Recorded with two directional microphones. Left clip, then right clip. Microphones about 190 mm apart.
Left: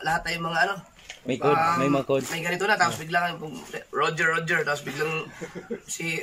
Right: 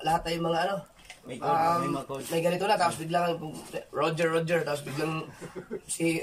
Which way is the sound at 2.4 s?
20° right (ahead or behind).